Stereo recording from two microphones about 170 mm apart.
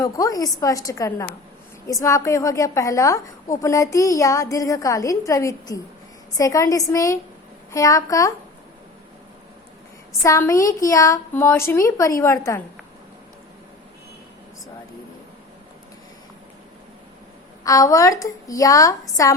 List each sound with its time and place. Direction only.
0.0 s a woman's voice: 20° left (ahead or behind)
10.2 s a woman's voice: 20° left (ahead or behind)
17.6 s a woman's voice: 20° left (ahead or behind)